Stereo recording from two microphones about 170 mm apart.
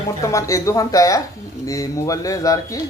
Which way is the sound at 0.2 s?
20° left (ahead or behind).